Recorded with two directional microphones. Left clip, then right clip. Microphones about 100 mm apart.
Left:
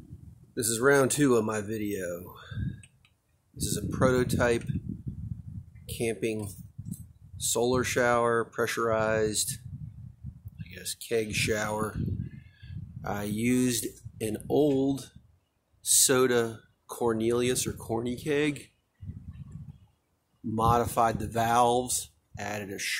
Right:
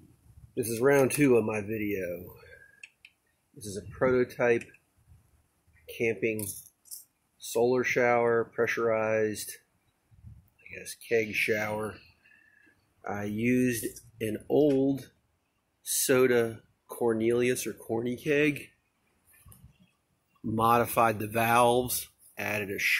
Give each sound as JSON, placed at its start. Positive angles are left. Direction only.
{"t": 0.6, "sound": "speech", "side_deg": 25}
{"t": 3.6, "sound": "speech", "side_deg": 25}
{"t": 5.9, "sound": "speech", "side_deg": 25}
{"t": 10.7, "sound": "speech", "side_deg": 25}
{"t": 13.0, "sound": "speech", "side_deg": 20}
{"t": 20.5, "sound": "speech", "side_deg": -20}